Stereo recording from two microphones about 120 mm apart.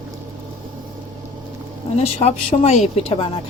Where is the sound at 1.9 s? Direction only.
60° left (ahead or behind).